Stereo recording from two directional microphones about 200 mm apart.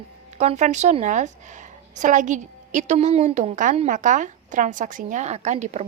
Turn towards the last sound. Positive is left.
turn(degrees=-35)  # may be behind; listen again after turning